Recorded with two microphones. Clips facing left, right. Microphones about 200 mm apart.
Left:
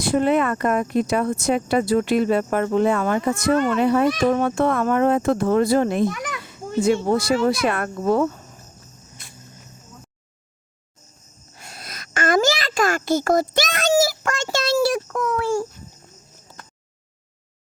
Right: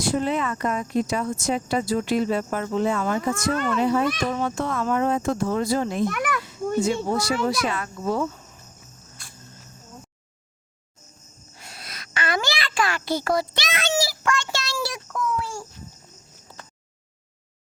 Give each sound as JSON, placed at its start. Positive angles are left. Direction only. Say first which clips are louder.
{"t": 0.0, "sound": "speech", "louder": "left 5 dB", "side_deg": 60}
{"t": 6.1, "sound": "a child's voice", "louder": "right 2 dB", "side_deg": -60}
{"t": 6.8, "sound": "speech", "louder": "left 5 dB", "side_deg": 60}
{"t": 11.5, "sound": "a sound", "louder": "left 3 dB", "side_deg": 45}